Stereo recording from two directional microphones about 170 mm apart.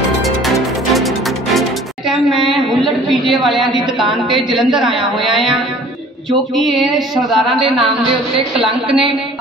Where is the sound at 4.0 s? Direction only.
30° right (ahead or behind).